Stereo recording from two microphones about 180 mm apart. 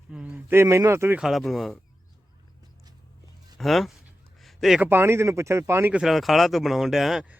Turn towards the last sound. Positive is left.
turn(degrees=-5)  # may be behind; listen again after turning